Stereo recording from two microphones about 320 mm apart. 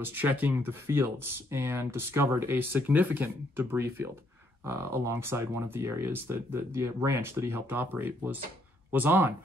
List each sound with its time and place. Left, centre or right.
0.0 s speech: centre